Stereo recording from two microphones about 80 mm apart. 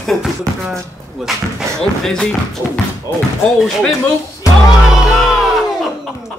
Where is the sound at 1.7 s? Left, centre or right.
Centre.